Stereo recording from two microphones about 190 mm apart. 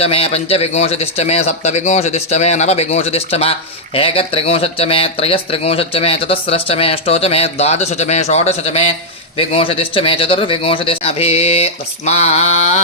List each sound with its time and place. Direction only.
0.0 s speech: 30° left (ahead or behind)